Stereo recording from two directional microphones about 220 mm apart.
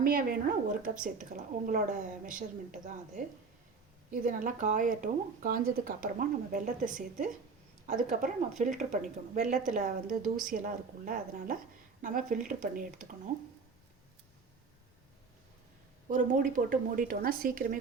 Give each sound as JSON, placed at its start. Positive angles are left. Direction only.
{"t": 0.0, "sound": "speech", "side_deg": -40}
{"t": 16.0, "sound": "speech", "side_deg": -40}